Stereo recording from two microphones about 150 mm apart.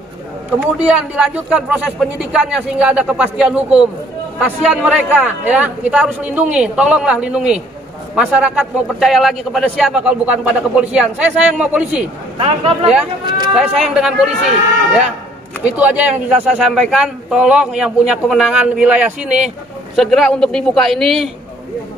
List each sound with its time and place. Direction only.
0.8 s a man's voice: 10° right (ahead or behind)
12.4 s speech: 40° right (ahead or behind)
13.2 s speech: 30° right (ahead or behind)
13.6 s speech: centre (ahead or behind)
15.6 s speech: 10° right (ahead or behind)